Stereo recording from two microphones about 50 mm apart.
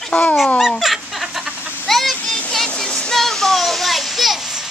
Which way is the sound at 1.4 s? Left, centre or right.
Right.